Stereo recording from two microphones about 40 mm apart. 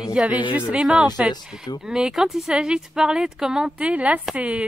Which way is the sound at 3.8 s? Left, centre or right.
Right.